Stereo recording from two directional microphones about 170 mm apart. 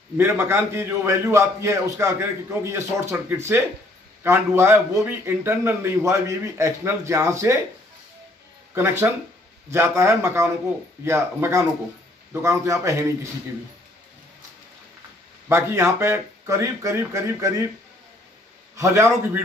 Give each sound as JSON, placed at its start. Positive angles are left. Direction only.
{"t": 0.2, "sound": "a man's voice", "side_deg": -15}
{"t": 8.7, "sound": "a man's voice", "side_deg": -15}
{"t": 15.4, "sound": "a man's voice", "side_deg": -15}
{"t": 18.8, "sound": "a man's voice", "side_deg": -15}